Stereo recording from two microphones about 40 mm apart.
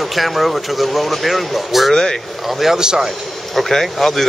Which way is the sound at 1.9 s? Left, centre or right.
Centre.